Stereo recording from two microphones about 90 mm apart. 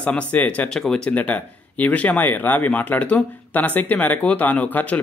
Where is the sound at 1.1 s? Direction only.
15° left (ahead or behind).